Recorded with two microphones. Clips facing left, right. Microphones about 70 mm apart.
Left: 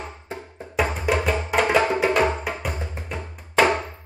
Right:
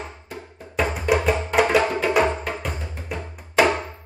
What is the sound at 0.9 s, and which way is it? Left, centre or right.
Music, centre.